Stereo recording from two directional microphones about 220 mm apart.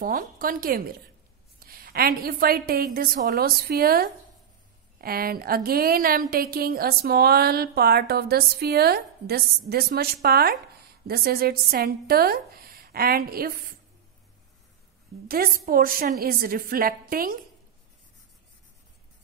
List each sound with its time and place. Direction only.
0.0 s a woman's voice: 40° right (ahead or behind)
15.2 s a woman's voice: 40° right (ahead or behind)